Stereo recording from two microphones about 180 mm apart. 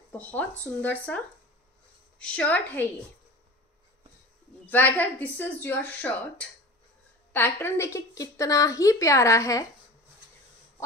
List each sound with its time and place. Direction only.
0.1 s a woman's voice: 10° left (ahead or behind)
4.6 s a woman's voice: 10° left (ahead or behind)